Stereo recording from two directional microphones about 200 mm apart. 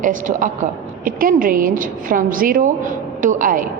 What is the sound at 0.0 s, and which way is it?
A woman's voice, 40° right (ahead or behind).